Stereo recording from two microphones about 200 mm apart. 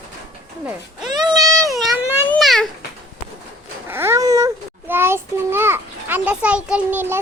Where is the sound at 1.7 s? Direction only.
Centre (ahead or behind).